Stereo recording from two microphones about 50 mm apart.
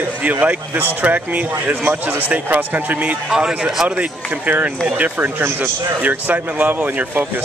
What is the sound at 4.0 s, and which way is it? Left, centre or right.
A man's voice, right.